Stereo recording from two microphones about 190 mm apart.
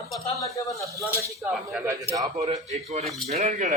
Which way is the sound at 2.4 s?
35° right (ahead or behind).